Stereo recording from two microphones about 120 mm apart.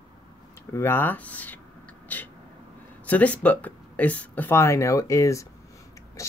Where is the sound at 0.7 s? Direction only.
20° left (ahead or behind).